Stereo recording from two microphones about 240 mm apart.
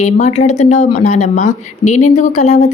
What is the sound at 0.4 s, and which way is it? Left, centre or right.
A woman's voice, left.